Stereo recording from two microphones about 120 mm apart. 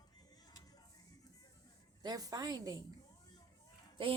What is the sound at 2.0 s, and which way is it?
Speech, 35° right (ahead or behind).